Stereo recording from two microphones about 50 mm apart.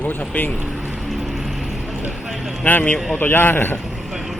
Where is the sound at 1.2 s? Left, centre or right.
Centre.